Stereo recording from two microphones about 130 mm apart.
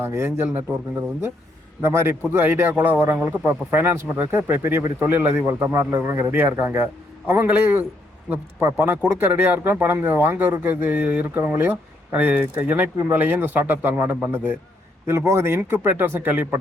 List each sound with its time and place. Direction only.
0.0 s speech: 20° right (ahead or behind)
1.8 s speech: 20° right (ahead or behind)
8.8 s speech: 15° right (ahead or behind)